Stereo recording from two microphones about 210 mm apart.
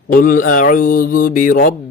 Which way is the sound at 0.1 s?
40° left (ahead or behind).